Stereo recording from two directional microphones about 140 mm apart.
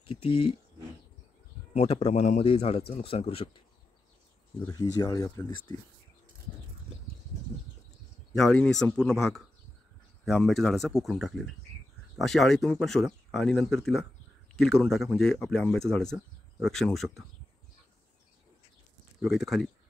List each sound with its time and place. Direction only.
0.0 s speech: 40° left (ahead or behind)
1.7 s speech: 50° left (ahead or behind)
2.4 s speech: 45° left (ahead or behind)
4.9 s speech: 25° left (ahead or behind)
8.4 s speech: 5° left (ahead or behind)
19.2 s speech: centre (ahead or behind)